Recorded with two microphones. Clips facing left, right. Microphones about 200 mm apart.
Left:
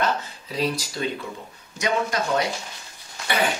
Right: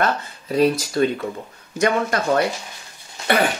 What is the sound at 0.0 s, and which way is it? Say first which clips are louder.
Speech: right 3 dB; 50° right (ahead or behind).